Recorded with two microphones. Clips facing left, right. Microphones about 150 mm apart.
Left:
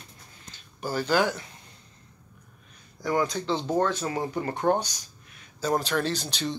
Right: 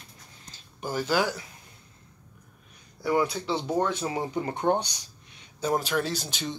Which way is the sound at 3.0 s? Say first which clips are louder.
Right 1 dB; 10° right (ahead or behind).